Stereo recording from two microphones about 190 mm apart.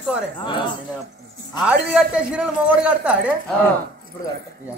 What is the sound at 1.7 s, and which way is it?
A man's voice, 5° right (ahead or behind).